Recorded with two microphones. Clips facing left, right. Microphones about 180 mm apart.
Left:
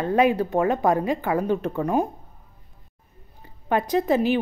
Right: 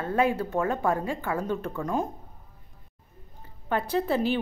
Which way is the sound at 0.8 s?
85° left.